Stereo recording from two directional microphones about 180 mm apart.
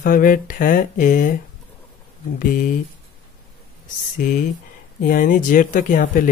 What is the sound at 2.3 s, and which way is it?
Speech, 50° left (ahead or behind).